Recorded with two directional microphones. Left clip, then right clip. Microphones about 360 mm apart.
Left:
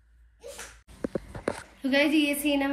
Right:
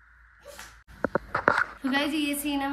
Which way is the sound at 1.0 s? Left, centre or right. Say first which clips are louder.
Right 7 dB; left.